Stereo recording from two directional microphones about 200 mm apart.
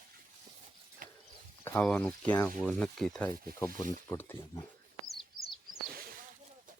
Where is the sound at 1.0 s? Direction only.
45° right (ahead or behind).